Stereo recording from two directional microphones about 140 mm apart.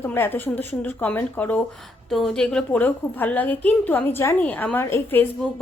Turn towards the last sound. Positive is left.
turn(degrees=15)  # may be behind; listen again after turning